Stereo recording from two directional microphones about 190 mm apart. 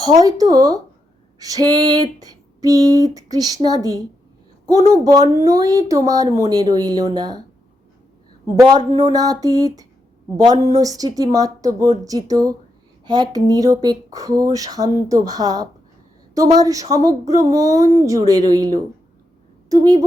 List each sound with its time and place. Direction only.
0.0 s speech: 20° right (ahead or behind)
8.5 s speech: 20° right (ahead or behind)